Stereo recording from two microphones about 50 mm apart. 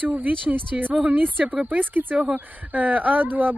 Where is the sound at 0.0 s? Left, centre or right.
Right.